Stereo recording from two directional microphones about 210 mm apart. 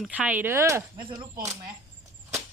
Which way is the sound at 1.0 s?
25° right (ahead or behind).